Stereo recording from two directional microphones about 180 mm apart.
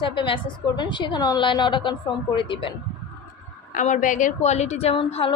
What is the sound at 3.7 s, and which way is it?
Speech, 45° left (ahead or behind).